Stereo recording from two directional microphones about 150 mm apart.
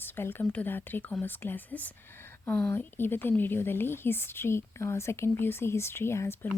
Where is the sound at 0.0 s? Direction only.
15° left (ahead or behind).